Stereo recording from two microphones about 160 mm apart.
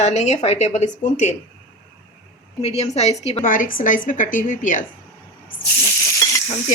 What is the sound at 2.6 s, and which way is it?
Speech, 40° left (ahead or behind).